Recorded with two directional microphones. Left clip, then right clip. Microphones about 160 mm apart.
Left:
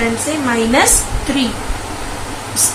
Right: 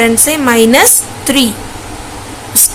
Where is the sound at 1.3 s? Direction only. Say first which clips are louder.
Right 7 dB; 90° right.